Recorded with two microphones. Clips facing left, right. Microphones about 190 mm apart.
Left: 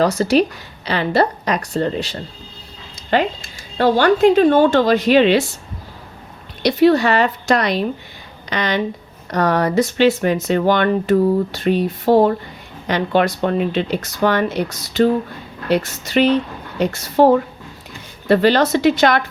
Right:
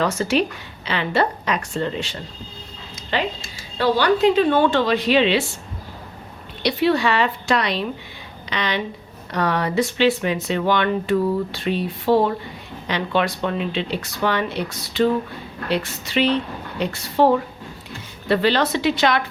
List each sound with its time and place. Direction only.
0.0 s a woman's voice: 35° left (ahead or behind)
3.1 s speech: 50° left (ahead or behind)
6.6 s speech: 45° left (ahead or behind)